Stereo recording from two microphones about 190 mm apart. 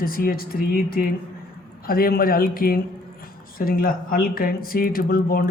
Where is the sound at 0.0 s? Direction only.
50° left (ahead or behind).